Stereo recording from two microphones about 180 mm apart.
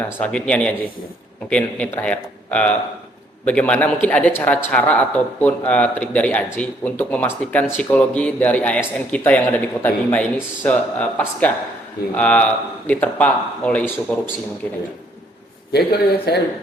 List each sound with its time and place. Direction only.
0.0 s speech: 5° left (ahead or behind)
15.7 s a man's voice: 60° left (ahead or behind)